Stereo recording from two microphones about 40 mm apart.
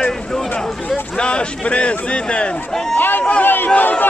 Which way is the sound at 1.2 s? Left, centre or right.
Left.